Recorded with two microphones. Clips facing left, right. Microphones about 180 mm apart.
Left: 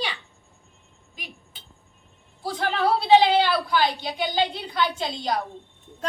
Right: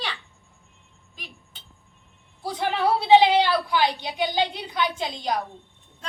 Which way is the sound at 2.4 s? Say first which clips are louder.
Even; 15° right (ahead or behind).